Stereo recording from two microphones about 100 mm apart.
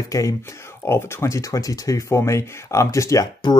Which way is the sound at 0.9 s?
25° left (ahead or behind).